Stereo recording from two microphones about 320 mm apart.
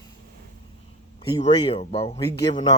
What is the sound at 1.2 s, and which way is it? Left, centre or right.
Speech, centre.